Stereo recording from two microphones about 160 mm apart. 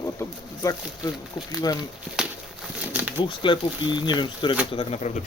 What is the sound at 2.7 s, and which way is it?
Pigeon, 10° right (ahead or behind).